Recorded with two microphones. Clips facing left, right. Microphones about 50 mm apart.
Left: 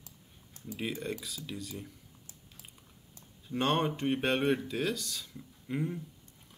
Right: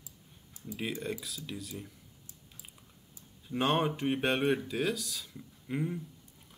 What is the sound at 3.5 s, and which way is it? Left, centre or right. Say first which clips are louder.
Speech: even; centre.